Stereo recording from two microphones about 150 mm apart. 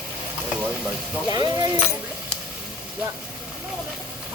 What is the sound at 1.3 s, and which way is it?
Speech, 25° right (ahead or behind).